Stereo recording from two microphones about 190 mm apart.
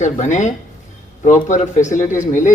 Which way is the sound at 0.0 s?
40° left (ahead or behind).